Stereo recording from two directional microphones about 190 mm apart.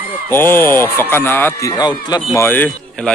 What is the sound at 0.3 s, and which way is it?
A man's voice, 10° left (ahead or behind).